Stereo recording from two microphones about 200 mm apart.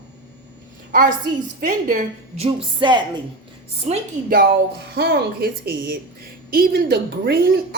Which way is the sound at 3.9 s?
30° right (ahead or behind).